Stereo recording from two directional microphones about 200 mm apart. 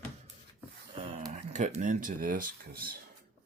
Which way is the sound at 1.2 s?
40° right (ahead or behind).